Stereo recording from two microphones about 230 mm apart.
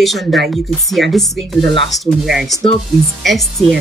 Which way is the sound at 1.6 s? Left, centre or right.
Right.